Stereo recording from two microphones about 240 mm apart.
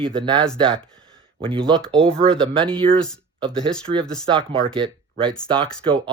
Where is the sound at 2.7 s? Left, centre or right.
Right.